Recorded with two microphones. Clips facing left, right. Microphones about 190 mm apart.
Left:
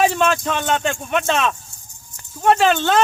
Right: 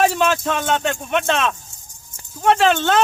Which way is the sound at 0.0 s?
Centre (ahead or behind).